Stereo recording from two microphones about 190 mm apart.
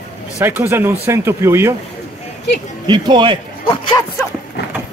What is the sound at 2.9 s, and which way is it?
Speech, 25° right (ahead or behind).